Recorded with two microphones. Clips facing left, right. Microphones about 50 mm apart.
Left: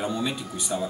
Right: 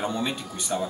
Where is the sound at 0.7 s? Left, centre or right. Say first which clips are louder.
Right 1 dB; centre.